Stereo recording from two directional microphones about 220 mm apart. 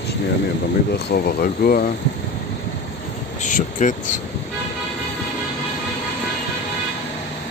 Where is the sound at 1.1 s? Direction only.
45° left (ahead or behind).